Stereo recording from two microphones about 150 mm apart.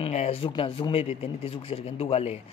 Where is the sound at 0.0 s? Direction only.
45° left (ahead or behind).